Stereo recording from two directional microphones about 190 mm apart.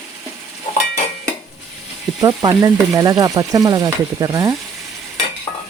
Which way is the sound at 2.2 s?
20° right (ahead or behind).